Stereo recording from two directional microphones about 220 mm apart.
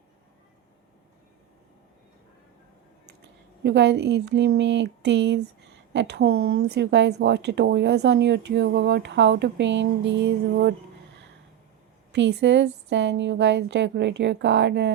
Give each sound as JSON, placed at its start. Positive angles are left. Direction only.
{"t": 3.6, "sound": "speech", "side_deg": -55}
{"t": 12.1, "sound": "speech", "side_deg": -55}